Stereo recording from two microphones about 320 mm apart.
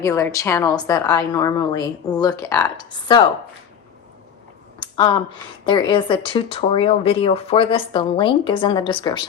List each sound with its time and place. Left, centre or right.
0.0 s speech: centre
4.8 s speech: centre